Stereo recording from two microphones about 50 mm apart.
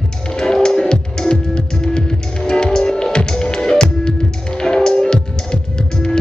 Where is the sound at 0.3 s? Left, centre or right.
Centre.